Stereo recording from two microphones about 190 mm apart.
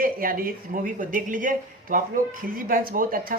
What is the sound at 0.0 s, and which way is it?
A woman's voice, 50° right (ahead or behind).